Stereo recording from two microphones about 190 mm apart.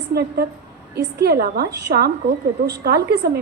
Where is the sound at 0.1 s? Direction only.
55° right (ahead or behind).